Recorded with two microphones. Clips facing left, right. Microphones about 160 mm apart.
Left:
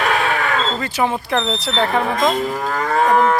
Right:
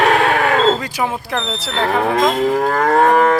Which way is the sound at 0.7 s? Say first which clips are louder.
Left 1 dB; 10° right (ahead or behind).